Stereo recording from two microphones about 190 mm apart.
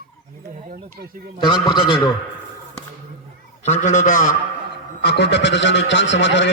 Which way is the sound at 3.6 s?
40° left (ahead or behind).